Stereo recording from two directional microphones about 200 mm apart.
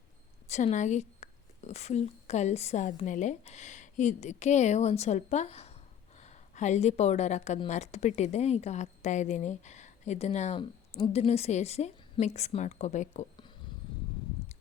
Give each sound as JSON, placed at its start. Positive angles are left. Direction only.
{"t": 0.4, "sound": "a woman's voice", "side_deg": 35}